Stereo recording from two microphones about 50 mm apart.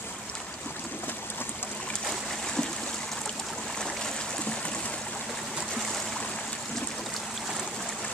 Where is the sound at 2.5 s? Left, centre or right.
Centre.